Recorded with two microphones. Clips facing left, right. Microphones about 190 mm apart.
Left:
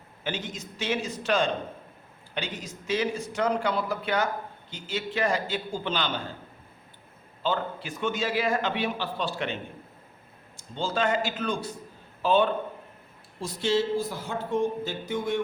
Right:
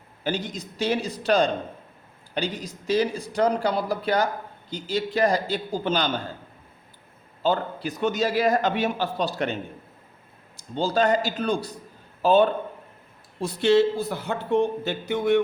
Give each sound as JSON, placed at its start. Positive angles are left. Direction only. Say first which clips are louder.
{"t": 0.3, "sound": "a man's voice", "louder": "right 5 dB", "side_deg": -35}
{"t": 7.4, "sound": "a man's voice", "louder": "right 5 dB", "side_deg": -40}
{"t": 10.6, "sound": "a man's voice", "louder": "right 5 dB", "side_deg": -35}
{"t": 13.4, "sound": "speech", "louder": "right 7 dB", "side_deg": -60}